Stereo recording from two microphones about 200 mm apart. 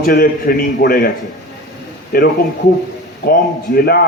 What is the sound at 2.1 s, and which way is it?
Speech, 50° left (ahead or behind).